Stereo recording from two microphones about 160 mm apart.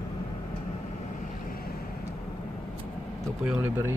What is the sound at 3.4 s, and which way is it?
Speech, 10° right (ahead or behind).